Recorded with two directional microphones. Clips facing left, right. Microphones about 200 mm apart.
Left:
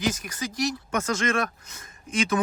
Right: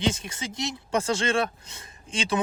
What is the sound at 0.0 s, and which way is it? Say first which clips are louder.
Speech: even; 25° right (ahead or behind).